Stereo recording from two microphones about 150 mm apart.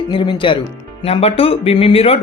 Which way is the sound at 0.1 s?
30° left (ahead or behind).